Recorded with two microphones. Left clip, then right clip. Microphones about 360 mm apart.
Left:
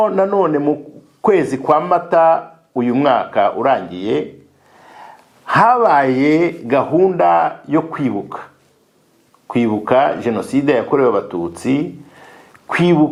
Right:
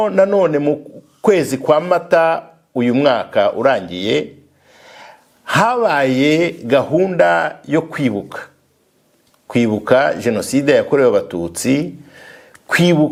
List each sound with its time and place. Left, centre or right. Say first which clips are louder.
0.0 s speech: right 1 dB; right
9.5 s speech: right 1 dB; right